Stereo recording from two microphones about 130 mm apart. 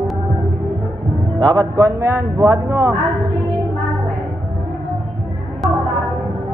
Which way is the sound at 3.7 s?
Centre (ahead or behind).